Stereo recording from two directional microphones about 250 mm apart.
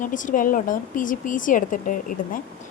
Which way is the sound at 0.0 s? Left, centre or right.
Left.